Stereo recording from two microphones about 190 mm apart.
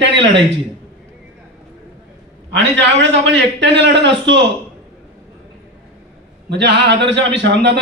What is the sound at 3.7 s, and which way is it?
Speech, 70° right (ahead or behind).